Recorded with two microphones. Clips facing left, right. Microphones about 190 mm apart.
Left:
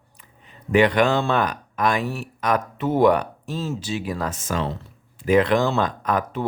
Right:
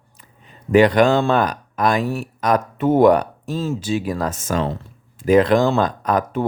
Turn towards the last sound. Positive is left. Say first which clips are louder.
# right 4 dB
turn(degrees=-40)  # may be behind; listen again after turning